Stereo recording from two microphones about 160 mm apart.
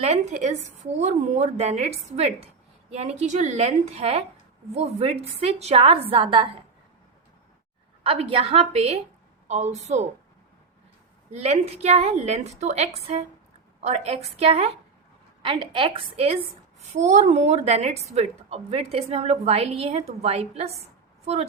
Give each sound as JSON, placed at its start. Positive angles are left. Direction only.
{"t": 0.0, "sound": "a woman's voice", "side_deg": -45}
{"t": 8.0, "sound": "a woman's voice", "side_deg": -35}
{"t": 11.3, "sound": "a woman's voice", "side_deg": -45}